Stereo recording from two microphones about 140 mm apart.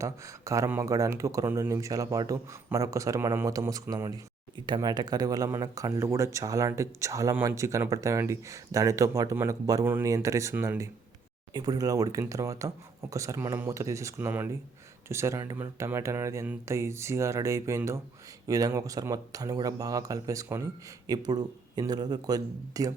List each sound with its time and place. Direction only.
0.0 s speech: 20° right (ahead or behind)
11.5 s speech: 30° right (ahead or behind)